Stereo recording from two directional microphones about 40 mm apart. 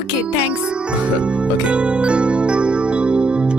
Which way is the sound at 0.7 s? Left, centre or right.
Right.